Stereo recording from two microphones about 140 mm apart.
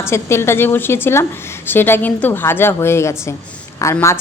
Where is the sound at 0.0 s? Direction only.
20° left (ahead or behind).